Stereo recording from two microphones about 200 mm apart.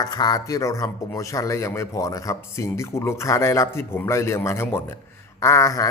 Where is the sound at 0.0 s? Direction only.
20° left (ahead or behind).